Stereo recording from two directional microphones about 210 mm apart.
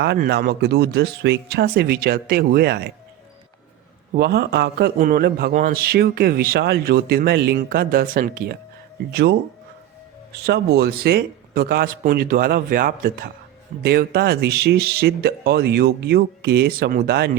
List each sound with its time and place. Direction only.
0.0 s a man's voice: 50° right (ahead or behind)
4.1 s a man's voice: 50° right (ahead or behind)
10.4 s a man's voice: 50° right (ahead or behind)